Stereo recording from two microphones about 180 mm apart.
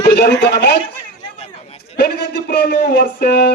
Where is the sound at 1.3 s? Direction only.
35° left (ahead or behind).